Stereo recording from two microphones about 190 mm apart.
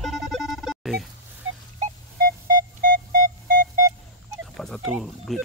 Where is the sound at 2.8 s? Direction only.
45° right (ahead or behind).